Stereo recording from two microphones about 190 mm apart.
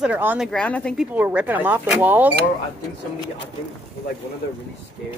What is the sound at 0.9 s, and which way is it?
Speech, 10° right (ahead or behind).